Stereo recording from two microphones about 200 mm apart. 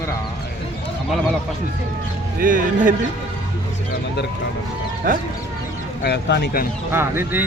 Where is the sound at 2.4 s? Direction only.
40° right (ahead or behind).